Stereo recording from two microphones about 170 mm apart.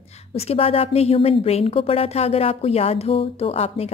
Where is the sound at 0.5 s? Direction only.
35° left (ahead or behind).